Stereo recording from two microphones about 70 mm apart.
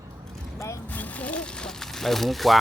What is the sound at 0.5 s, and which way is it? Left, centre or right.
Vehicle, left.